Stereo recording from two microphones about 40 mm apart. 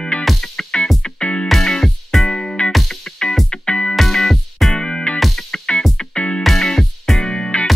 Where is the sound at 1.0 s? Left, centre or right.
Left.